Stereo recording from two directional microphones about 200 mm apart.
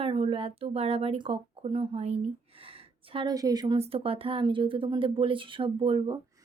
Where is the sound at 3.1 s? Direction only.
20° right (ahead or behind).